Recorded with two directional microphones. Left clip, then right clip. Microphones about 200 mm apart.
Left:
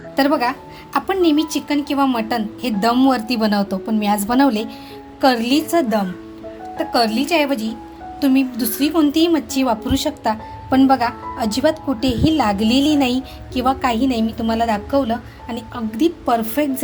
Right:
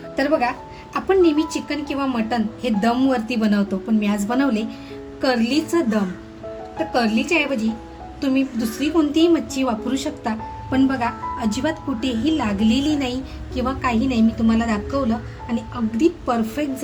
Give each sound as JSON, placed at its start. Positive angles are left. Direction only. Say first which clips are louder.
{"t": 0.2, "sound": "a woman's voice", "louder": "left 2 dB", "side_deg": 40}